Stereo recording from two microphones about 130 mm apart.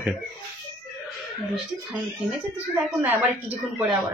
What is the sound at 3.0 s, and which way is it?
Speech, 15° right (ahead or behind).